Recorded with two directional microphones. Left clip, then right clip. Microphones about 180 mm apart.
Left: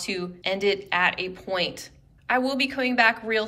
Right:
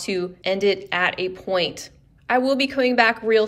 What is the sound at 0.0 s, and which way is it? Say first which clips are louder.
A woman's voice: right 4 dB; 15° right (ahead or behind).